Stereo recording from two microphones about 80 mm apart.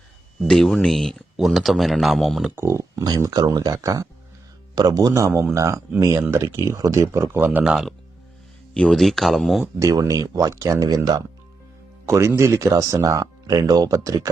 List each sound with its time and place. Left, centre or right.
0.4 s speech: centre
2.6 s speech: right
6.7 s speech: right
7.3 s speech: right
7.6 s speech: centre
9.7 s speech: right
10.8 s speech: right
12.0 s speech: right